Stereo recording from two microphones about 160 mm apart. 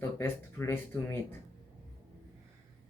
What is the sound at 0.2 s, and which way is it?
Speech, 15° left (ahead or behind).